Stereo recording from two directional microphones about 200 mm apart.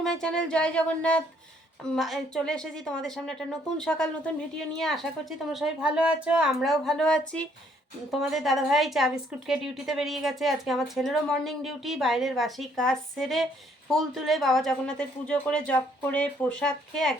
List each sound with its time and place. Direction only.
0.0 s a woman's voice: 5° left (ahead or behind)